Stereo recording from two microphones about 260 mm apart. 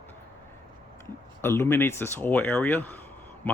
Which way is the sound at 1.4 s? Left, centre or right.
Centre.